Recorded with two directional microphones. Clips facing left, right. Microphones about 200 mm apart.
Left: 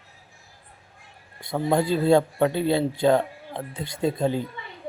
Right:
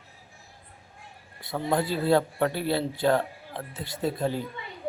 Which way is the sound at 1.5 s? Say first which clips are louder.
Left 4 dB; 25° left (ahead or behind).